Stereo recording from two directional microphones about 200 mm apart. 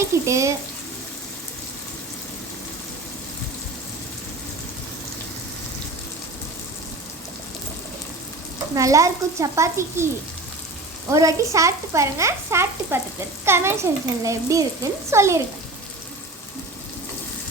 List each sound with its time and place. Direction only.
0.3 s speech: 15° right (ahead or behind)
8.7 s speech: 15° right (ahead or behind)
11.1 s speech: 15° right (ahead or behind)